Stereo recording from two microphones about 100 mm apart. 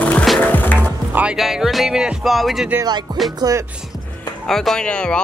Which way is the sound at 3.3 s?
35° right (ahead or behind).